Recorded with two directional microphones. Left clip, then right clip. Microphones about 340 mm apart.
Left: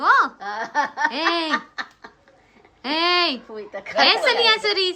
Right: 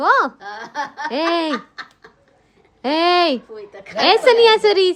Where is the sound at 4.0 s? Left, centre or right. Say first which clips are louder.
Right 5 dB; centre.